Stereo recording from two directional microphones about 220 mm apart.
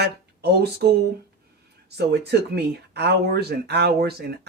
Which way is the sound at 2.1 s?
45° right (ahead or behind).